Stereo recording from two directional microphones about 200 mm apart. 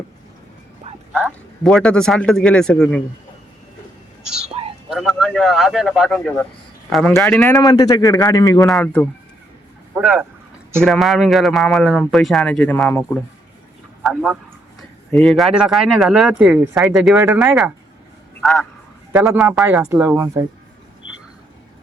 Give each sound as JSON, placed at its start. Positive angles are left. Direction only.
{"t": 1.1, "sound": "speech", "side_deg": -5}
{"t": 4.5, "sound": "whispering", "side_deg": -30}
{"t": 4.9, "sound": "speech", "side_deg": 0}
{"t": 7.5, "sound": "a man's voice", "side_deg": 20}
{"t": 8.6, "sound": "a man's voice", "side_deg": 5}
{"t": 9.9, "sound": "speech", "side_deg": -10}